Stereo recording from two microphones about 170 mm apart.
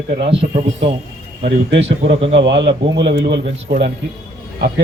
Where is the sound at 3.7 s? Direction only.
60° right (ahead or behind).